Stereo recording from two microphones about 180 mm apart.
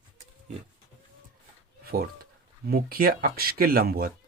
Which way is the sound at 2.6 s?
55° right (ahead or behind).